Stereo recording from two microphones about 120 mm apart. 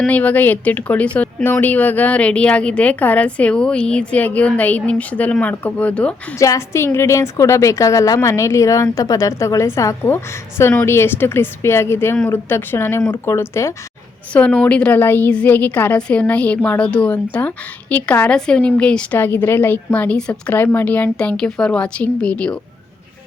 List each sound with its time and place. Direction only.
0.0 s a woman's voice: 10° left (ahead or behind)
6.4 s a woman's voice: 25° left (ahead or behind)
14.3 s a woman's voice: 10° left (ahead or behind)